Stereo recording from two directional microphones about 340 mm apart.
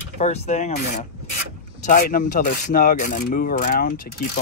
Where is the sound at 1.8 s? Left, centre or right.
Left.